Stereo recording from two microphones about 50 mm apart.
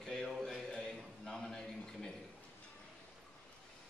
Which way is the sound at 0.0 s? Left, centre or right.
Centre.